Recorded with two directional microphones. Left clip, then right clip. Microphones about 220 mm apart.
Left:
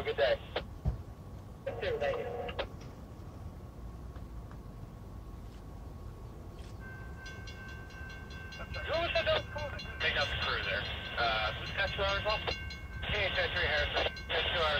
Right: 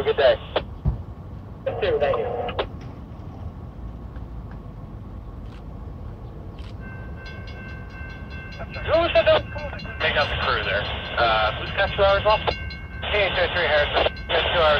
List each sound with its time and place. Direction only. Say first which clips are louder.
0.0 s vehicle: right 12 dB; 35° right (ahead or behind)
1.6 s radio: right 12 dB; 35° right (ahead or behind)
8.8 s a sound: right 14 dB; 40° right (ahead or behind)
9.9 s music: right 10 dB; 40° right (ahead or behind)
13.0 s a sound: right 11 dB; 40° right (ahead or behind)
14.2 s radio: right 13 dB; 35° right (ahead or behind)